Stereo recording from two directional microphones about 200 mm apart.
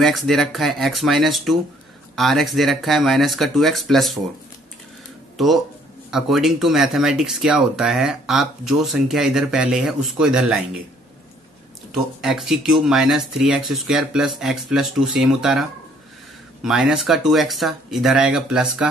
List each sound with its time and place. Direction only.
0.0 s speech: centre (ahead or behind)
6.0 s speech: centre (ahead or behind)
11.9 s speech: centre (ahead or behind)
16.6 s speech: 5° right (ahead or behind)